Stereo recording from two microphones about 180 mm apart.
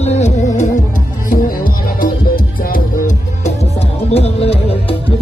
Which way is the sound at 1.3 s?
50° left (ahead or behind).